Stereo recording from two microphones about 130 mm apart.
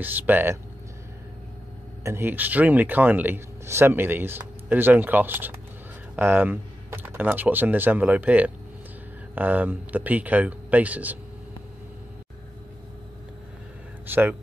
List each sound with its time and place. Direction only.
0.0 s speech: 15° right (ahead or behind)
2.0 s speech: 15° right (ahead or behind)
14.0 s speech: 15° right (ahead or behind)